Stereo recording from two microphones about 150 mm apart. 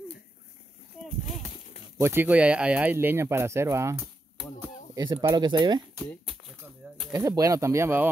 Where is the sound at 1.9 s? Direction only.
15° right (ahead or behind).